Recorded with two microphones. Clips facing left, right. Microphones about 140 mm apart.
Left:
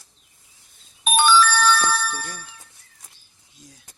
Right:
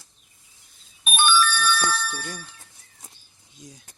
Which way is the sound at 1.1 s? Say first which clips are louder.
Left 4 dB; 90° left.